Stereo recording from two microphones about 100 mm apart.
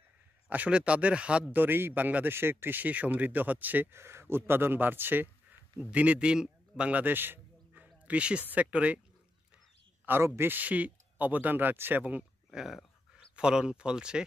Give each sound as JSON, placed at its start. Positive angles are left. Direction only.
{"t": 0.5, "sound": "a man's voice", "side_deg": -15}
{"t": 10.0, "sound": "speech", "side_deg": -25}